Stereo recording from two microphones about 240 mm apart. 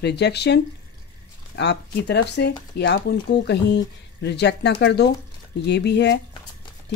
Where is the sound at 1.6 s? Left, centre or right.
Left.